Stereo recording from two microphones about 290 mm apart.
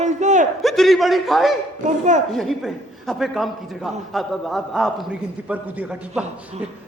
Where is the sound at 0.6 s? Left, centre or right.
Centre.